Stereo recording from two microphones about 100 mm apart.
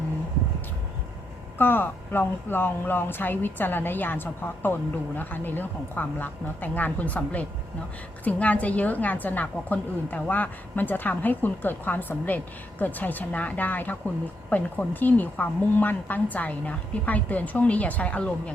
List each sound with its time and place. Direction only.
1.5 s a woman's voice: 20° left (ahead or behind)